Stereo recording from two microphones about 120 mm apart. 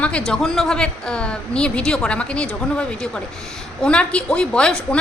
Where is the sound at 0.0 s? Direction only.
10° left (ahead or behind).